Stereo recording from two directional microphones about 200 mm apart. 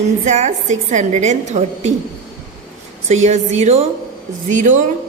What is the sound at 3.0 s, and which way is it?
A woman's voice, 35° right (ahead or behind).